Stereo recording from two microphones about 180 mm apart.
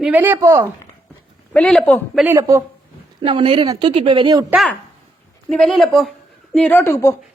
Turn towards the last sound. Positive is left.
turn(degrees=15)  # may be behind; listen again after turning